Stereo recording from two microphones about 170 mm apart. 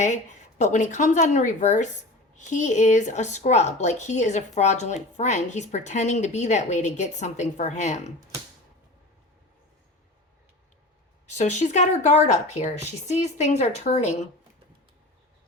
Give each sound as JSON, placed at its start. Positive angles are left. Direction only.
{"t": 0.6, "sound": "a woman's voice", "side_deg": 45}
{"t": 11.3, "sound": "a woman's voice", "side_deg": 40}